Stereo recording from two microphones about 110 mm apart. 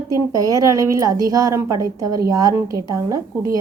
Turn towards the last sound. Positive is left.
turn(degrees=-30)  # may be behind; listen again after turning